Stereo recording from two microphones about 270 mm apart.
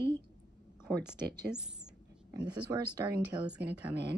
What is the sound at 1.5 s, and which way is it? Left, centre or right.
Speech, centre.